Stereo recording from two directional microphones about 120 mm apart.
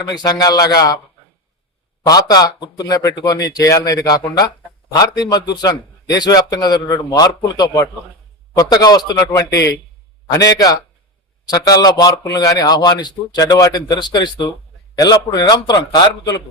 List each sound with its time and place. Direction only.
0.2 s a man's voice: 30° left (ahead or behind)
2.0 s a man's voice: 35° left (ahead or behind)